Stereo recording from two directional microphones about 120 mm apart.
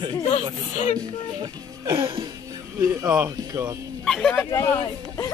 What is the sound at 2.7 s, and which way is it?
Speech, 25° right (ahead or behind).